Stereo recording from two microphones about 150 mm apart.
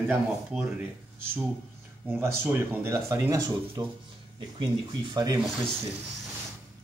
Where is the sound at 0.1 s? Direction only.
5° right (ahead or behind).